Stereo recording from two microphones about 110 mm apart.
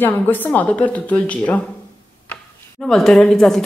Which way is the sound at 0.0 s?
15° left (ahead or behind).